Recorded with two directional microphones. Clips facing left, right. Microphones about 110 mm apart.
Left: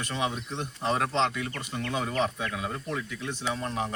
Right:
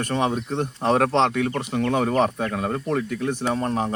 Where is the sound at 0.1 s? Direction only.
50° right (ahead or behind).